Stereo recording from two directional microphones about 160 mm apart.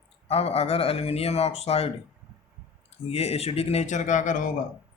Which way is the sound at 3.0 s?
40° left (ahead or behind).